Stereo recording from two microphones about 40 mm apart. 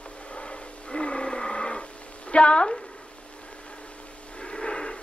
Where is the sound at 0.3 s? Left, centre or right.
Left.